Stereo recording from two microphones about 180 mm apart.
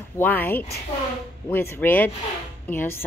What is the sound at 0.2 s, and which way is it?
Speech, 10° left (ahead or behind).